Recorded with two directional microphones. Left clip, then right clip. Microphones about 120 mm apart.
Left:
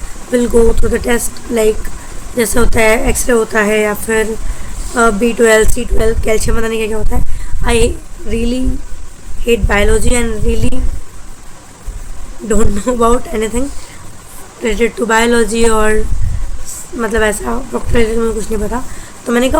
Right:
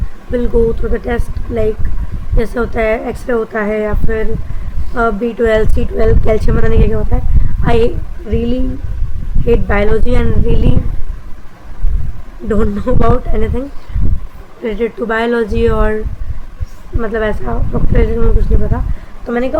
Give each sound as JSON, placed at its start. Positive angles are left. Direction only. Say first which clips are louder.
{"t": 0.3, "sound": "speech", "louder": "left 3 dB", "side_deg": 20}
{"t": 12.5, "sound": "speech", "louder": "left 1 dB", "side_deg": 15}
{"t": 17.0, "sound": "speech", "louder": "left 3 dB", "side_deg": 25}